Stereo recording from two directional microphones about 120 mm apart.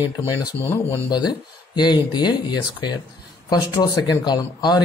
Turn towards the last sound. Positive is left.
turn(degrees=35)  # may be behind; listen again after turning